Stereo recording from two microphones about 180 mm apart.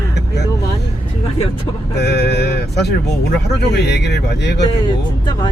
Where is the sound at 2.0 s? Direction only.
65° left (ahead or behind).